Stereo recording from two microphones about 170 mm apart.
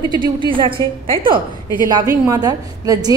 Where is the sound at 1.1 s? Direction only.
30° right (ahead or behind).